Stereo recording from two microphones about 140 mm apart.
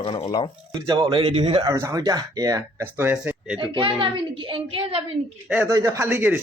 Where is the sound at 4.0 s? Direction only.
40° right (ahead or behind).